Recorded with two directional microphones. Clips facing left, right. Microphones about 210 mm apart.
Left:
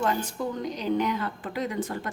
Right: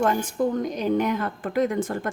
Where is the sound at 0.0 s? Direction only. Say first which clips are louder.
Right 5 dB; 50° right (ahead or behind).